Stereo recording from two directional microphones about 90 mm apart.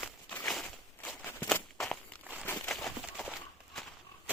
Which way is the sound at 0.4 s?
5° left (ahead or behind).